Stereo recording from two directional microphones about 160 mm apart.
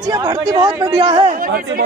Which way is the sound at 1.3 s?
65° right (ahead or behind).